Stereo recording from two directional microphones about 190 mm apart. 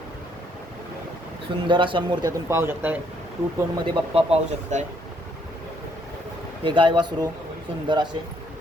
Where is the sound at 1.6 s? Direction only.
25° right (ahead or behind).